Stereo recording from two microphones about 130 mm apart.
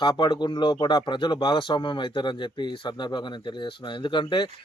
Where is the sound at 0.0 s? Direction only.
35° left (ahead or behind).